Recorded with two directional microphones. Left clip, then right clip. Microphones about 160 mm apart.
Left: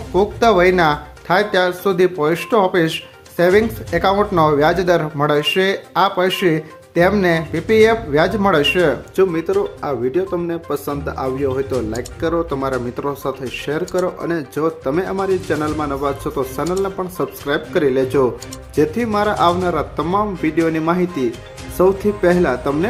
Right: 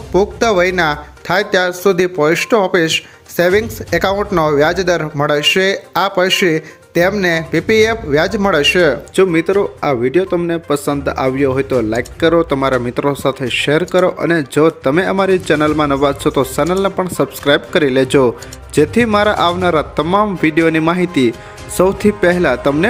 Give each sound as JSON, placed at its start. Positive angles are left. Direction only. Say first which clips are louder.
{"t": 0.1, "sound": "a man's voice", "louder": "right 1 dB", "side_deg": -20}